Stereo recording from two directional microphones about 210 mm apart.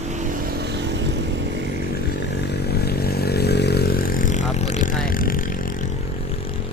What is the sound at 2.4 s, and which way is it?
Vehicle, 50° left (ahead or behind).